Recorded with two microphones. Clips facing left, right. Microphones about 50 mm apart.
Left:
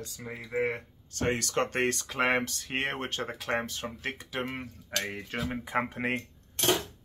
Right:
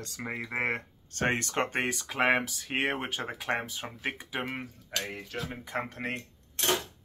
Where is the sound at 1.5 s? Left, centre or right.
Centre.